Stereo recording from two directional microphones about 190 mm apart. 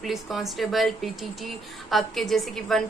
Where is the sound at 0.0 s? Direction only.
Centre (ahead or behind).